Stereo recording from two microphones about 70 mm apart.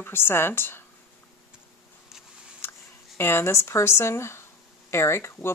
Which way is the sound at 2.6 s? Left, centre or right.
Left.